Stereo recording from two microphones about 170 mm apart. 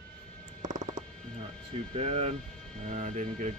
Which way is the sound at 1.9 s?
40° right (ahead or behind).